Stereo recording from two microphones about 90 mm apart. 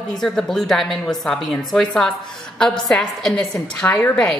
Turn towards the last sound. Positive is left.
turn(degrees=15)  # may be behind; listen again after turning